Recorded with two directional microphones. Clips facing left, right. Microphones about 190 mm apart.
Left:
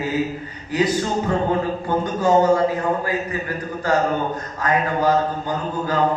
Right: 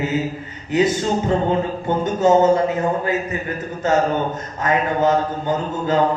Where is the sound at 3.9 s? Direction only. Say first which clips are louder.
Right 2 dB; 25° right (ahead or behind).